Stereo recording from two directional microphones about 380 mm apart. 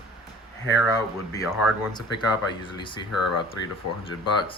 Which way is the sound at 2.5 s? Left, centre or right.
Centre.